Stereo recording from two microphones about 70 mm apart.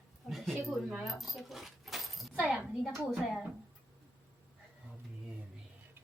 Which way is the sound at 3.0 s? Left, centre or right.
Centre.